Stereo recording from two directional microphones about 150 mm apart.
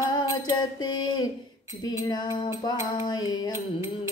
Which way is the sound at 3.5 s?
20° right (ahead or behind).